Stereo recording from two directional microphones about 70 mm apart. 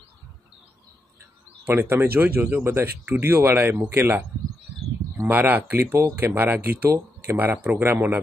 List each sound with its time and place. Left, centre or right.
1.7 s speech: right
5.3 s speech: right